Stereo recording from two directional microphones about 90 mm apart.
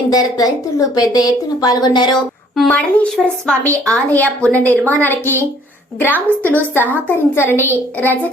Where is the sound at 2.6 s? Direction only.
15° left (ahead or behind).